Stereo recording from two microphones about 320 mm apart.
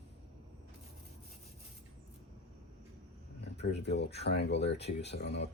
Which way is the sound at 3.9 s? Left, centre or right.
Left.